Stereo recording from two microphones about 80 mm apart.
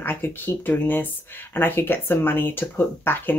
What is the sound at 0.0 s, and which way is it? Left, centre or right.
Speech, left.